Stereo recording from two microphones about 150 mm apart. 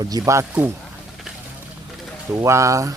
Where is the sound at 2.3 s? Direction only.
20° right (ahead or behind).